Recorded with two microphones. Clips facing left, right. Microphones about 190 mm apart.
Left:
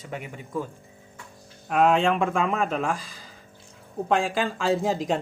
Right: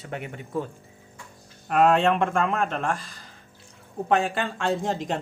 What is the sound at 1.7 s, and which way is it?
Speech, centre (ahead or behind).